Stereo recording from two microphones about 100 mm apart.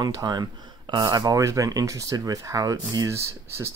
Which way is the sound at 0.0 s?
40° right (ahead or behind).